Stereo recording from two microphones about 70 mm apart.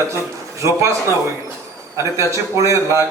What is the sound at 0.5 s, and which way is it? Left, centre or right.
A man's voice, right.